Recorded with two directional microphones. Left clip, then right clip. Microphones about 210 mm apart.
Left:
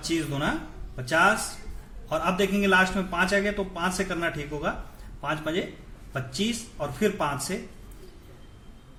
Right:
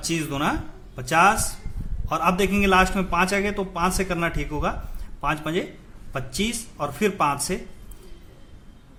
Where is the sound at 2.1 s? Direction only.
40° right (ahead or behind).